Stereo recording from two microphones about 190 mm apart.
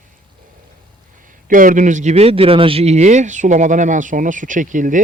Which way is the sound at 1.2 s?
45° right (ahead or behind).